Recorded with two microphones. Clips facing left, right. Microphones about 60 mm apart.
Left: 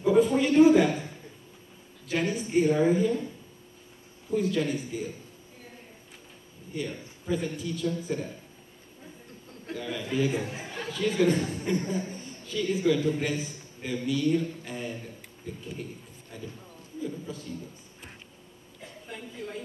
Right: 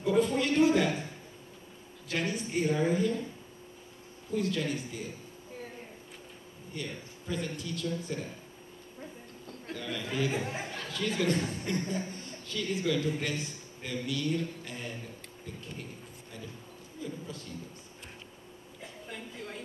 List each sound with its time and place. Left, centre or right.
0.0 s a sound: centre
2.0 s speech: centre
4.3 s speech: centre
6.7 s a man's voice: centre
9.7 s a man's voice: centre
10.3 s speech: right
10.8 s speech: centre
18.8 s a sound: centre